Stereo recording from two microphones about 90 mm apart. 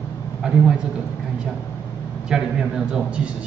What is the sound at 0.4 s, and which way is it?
Speech, 10° right (ahead or behind).